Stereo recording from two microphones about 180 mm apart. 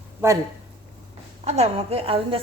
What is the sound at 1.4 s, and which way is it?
Speech, 35° right (ahead or behind).